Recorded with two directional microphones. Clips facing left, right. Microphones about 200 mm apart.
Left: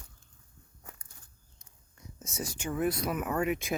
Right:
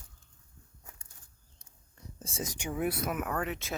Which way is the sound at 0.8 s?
65° left (ahead or behind).